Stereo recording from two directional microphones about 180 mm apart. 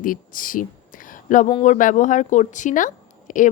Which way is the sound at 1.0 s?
45° left (ahead or behind).